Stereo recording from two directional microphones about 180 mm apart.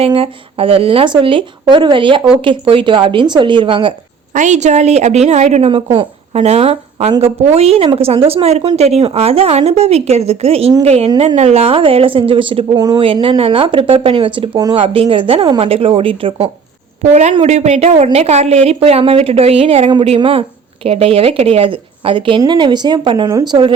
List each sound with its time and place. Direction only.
0.0 s a woman's voice: 30° right (ahead or behind)
4.4 s a woman's voice: 40° right (ahead or behind); by 23.7 s 25° right (ahead or behind)